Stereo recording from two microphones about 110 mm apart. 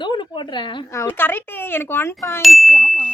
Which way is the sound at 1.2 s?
20° left (ahead or behind).